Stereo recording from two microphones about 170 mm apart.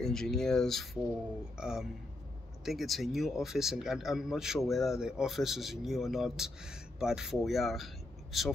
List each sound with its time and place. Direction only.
0.0 s speech: 5° left (ahead or behind)